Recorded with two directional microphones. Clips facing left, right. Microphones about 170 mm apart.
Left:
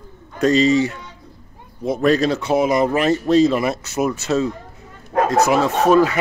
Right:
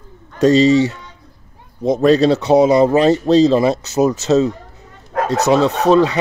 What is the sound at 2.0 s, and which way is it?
Speech, 30° right (ahead or behind).